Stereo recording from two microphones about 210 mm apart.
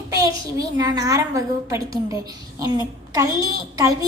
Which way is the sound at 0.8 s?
15° right (ahead or behind).